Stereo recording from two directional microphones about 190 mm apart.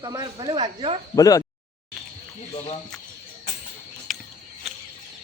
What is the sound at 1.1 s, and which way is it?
Speech, 20° left (ahead or behind).